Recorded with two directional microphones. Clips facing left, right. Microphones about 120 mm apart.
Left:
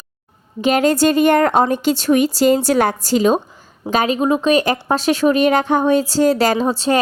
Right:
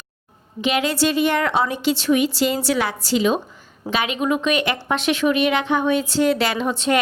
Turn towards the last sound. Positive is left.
turn(degrees=35)  # may be behind; listen again after turning